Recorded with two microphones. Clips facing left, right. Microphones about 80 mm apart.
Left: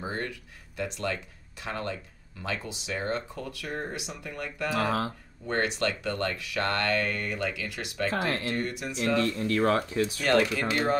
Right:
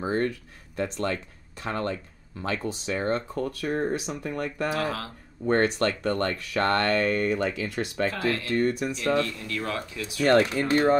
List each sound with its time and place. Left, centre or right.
0.0 s speech: right
4.7 s speech: left
5.5 s speech: right
8.2 s speech: left
8.5 s speech: right
9.2 s speech: left
10.2 s speech: right